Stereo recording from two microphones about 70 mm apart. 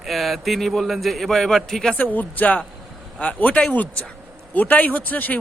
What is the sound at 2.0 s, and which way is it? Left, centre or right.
A woman's voice, left.